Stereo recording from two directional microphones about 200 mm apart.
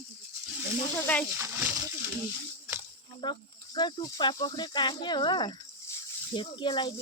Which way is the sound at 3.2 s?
20° left (ahead or behind).